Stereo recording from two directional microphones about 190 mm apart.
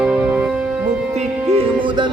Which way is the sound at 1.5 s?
25° right (ahead or behind).